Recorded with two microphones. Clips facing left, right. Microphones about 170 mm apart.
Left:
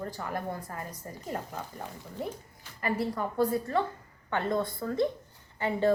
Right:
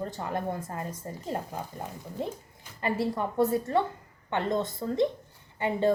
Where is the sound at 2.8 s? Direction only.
20° right (ahead or behind).